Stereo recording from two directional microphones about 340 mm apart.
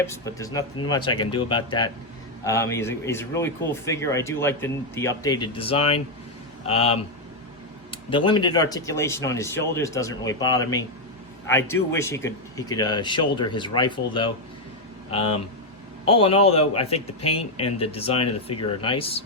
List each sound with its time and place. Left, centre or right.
0.0 s speech: centre